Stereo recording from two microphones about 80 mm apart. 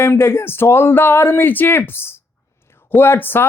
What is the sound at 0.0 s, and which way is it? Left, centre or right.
Speech, left.